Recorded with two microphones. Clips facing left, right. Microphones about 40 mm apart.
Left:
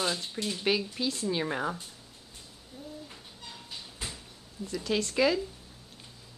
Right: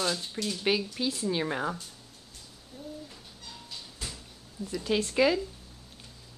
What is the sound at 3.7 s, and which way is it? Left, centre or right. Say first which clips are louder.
Cat: left 1 dB; left.